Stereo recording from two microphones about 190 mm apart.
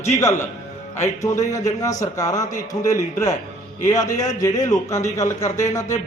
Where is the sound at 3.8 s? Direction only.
20° left (ahead or behind).